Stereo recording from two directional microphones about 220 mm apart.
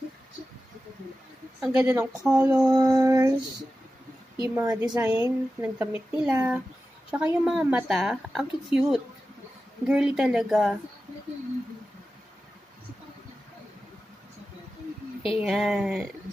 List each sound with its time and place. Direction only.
1.6 s a woman's voice: 5° right (ahead or behind)
2.7 s a woman's voice: 15° right (ahead or behind)
4.6 s a woman's voice: 10° right (ahead or behind)
15.2 s speech: centre (ahead or behind)